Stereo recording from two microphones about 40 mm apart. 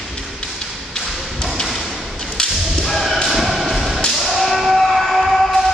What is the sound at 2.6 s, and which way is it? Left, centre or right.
Whip, centre.